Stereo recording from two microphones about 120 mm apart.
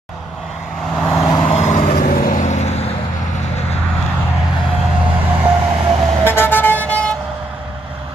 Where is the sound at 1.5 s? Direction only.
65° left (ahead or behind).